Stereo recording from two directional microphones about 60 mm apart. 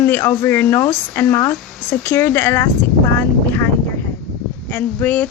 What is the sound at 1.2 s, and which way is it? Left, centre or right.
Speech, left.